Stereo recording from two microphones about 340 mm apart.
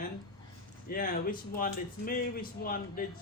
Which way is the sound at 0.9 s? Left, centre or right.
Left.